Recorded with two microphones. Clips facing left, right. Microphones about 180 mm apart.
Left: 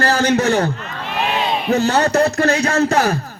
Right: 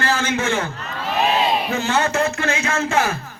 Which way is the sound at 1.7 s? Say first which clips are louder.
Left 5 dB; 40° left (ahead or behind).